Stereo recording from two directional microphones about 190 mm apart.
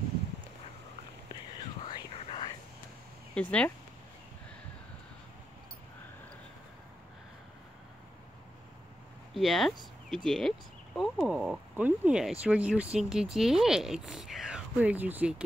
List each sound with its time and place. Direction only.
2.1 s whispering: 30° left (ahead or behind)
3.3 s speech: 5° left (ahead or behind)
9.3 s speech: centre (ahead or behind)